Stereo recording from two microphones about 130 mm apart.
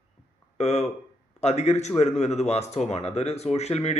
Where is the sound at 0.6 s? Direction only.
55° left (ahead or behind).